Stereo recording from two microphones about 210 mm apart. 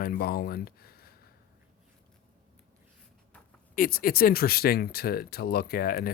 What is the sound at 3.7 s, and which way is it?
Speech, 45° left (ahead or behind).